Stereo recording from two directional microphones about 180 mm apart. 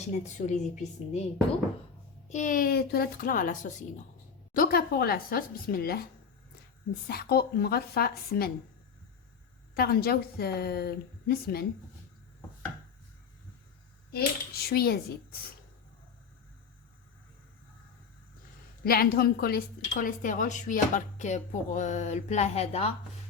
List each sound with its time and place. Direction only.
0.1 s a woman's voice: 40° left (ahead or behind)
2.3 s a woman's voice: 45° left (ahead or behind)
4.5 s speech: 55° left (ahead or behind)
7.1 s speech: 60° left (ahead or behind)
9.7 s speech: 60° left (ahead or behind)
14.1 s speech: 60° left (ahead or behind)
18.8 s a woman's voice: 55° left (ahead or behind); by 22.9 s 35° left (ahead or behind)